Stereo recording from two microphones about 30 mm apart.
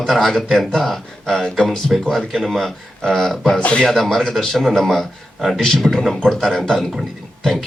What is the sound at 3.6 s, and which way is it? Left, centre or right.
Speech, left.